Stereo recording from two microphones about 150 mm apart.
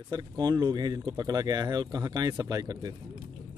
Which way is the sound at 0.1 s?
30° right (ahead or behind).